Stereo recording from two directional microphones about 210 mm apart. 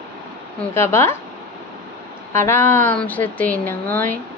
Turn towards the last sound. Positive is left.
turn(degrees=10)  # may be behind; listen again after turning